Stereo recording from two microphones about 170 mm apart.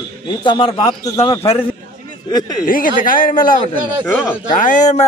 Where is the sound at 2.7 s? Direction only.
55° left (ahead or behind).